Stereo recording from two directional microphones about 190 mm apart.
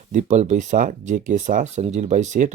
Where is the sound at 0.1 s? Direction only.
40° right (ahead or behind).